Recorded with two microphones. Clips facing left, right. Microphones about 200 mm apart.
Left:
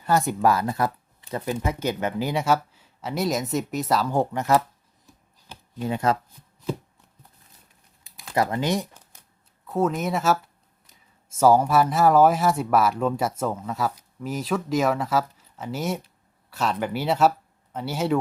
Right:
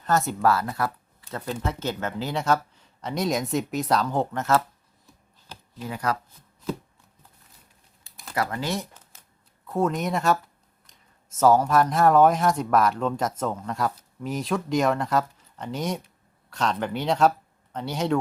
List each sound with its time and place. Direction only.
0.0 s speech: 15° left (ahead or behind)
5.9 s speech: 25° left (ahead or behind)
8.4 s speech: 20° left (ahead or behind)
9.6 s speech: centre (ahead or behind)